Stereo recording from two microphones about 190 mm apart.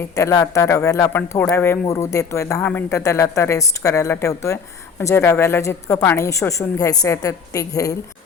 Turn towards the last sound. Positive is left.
turn(degrees=15)  # may be behind; listen again after turning